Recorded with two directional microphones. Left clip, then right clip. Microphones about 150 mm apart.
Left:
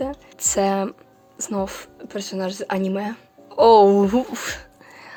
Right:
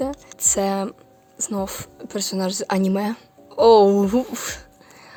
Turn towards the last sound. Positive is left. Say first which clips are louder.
# even
turn(degrees=-20)  # may be behind; listen again after turning